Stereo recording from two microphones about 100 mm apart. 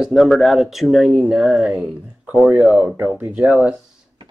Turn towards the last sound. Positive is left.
turn(degrees=-15)  # may be behind; listen again after turning